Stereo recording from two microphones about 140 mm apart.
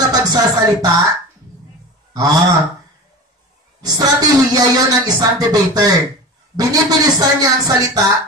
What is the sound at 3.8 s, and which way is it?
A man's voice, 25° right (ahead or behind).